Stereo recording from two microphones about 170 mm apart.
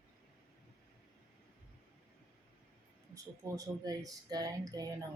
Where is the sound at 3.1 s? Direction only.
20° right (ahead or behind).